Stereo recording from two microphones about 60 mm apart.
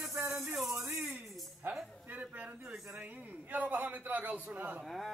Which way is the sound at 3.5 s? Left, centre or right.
Right.